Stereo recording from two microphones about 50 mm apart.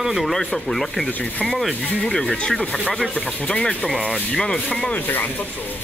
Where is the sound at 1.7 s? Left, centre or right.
Centre.